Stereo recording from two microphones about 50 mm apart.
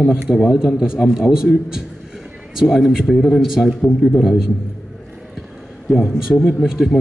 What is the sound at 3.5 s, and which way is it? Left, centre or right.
Speech, centre.